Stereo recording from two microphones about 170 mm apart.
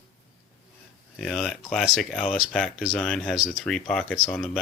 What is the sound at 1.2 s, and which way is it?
Speech, centre (ahead or behind).